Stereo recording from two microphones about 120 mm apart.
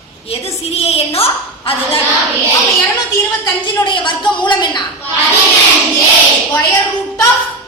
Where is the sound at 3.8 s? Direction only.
40° left (ahead or behind).